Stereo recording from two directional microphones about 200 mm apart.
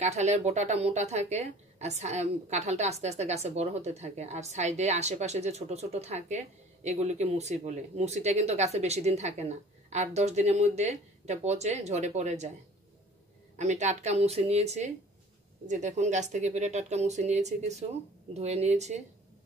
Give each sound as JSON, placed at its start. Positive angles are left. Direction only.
{"t": 0.0, "sound": "a woman's voice", "side_deg": -35}
{"t": 13.6, "sound": "a woman's voice", "side_deg": -35}